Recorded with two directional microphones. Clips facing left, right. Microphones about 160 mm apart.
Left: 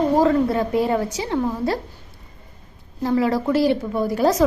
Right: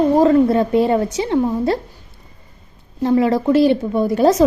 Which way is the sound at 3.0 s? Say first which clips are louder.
Right 4 dB; 25° right (ahead or behind).